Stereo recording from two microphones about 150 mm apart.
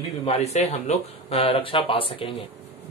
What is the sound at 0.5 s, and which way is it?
Speech, 45° left (ahead or behind).